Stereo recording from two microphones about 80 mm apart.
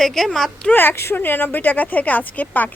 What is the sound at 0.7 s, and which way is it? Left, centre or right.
Speech, left.